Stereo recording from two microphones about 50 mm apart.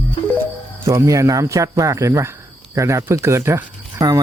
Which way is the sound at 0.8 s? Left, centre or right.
Right.